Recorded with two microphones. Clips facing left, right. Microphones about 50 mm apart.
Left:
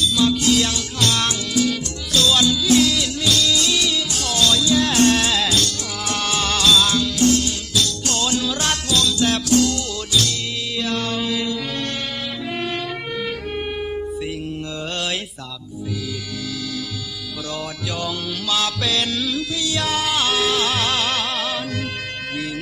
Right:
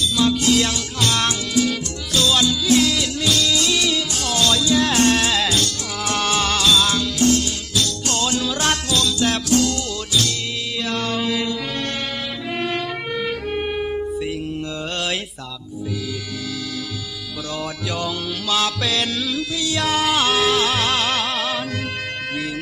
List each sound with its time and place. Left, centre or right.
0.2 s music: right
6.5 s music: centre
10.8 s mantra: right
12.5 s music: right
18.0 s music: right